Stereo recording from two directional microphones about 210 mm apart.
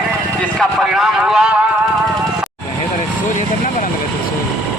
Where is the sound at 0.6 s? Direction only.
Centre (ahead or behind).